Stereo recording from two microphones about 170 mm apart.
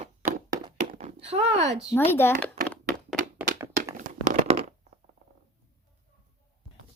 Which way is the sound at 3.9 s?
45° right (ahead or behind).